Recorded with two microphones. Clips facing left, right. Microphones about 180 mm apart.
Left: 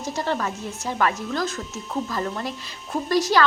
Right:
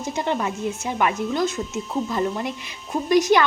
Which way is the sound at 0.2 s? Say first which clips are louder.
Right 2 dB; 20° right (ahead or behind).